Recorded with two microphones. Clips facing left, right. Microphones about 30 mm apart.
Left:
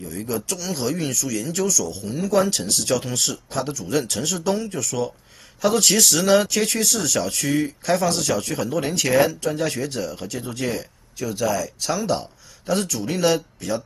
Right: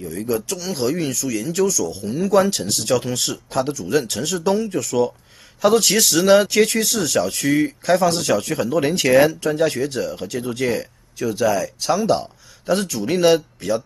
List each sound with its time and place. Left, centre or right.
0.1 s speech: centre
10.2 s speech: centre
12.8 s speech: right